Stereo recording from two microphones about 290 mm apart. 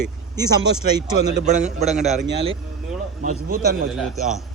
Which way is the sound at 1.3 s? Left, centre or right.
Right.